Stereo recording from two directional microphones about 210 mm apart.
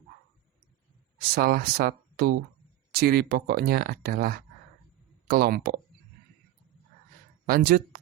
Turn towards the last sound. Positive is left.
turn(degrees=-45)  # may be behind; listen again after turning